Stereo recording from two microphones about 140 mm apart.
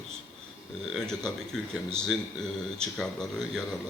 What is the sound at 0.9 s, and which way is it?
Speech, 5° left (ahead or behind).